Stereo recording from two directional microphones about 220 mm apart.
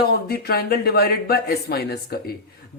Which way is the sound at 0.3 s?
45° left (ahead or behind).